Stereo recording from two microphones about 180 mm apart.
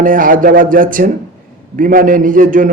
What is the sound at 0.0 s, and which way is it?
Speech, 50° right (ahead or behind).